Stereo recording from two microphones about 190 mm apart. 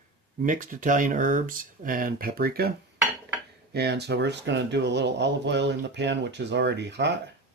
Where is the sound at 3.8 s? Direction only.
60° right (ahead or behind).